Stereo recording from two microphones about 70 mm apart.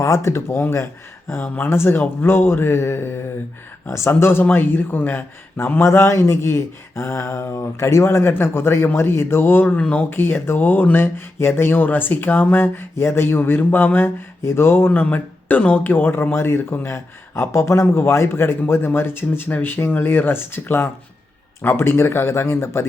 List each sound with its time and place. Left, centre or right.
0.0 s speech: left
1.3 s speech: left